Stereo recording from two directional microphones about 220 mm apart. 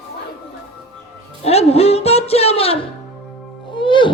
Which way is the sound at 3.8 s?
20° left (ahead or behind).